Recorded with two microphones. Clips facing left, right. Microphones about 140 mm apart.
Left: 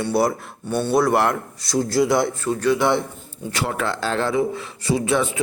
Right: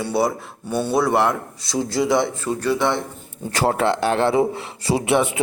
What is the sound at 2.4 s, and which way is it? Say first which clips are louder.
Speech: left 2 dB; 10° right (ahead or behind).